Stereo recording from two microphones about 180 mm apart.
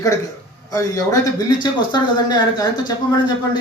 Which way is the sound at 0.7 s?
20° left (ahead or behind).